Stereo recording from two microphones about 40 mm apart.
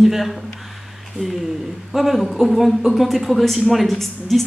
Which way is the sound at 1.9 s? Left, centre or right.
Centre.